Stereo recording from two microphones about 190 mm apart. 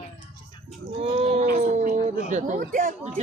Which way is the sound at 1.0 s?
30° right (ahead or behind).